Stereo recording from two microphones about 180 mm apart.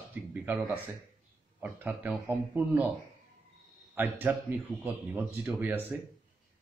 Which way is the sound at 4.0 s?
10° right (ahead or behind).